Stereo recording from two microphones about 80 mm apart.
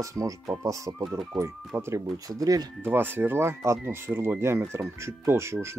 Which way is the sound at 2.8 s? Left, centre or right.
Right.